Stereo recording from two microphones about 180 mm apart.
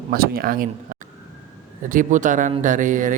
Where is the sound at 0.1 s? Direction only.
55° right (ahead or behind).